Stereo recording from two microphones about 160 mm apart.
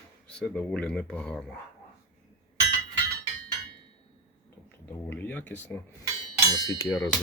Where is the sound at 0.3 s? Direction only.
5° left (ahead or behind).